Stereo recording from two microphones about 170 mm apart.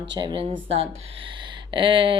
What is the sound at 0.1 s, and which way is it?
A woman's voice, 25° right (ahead or behind).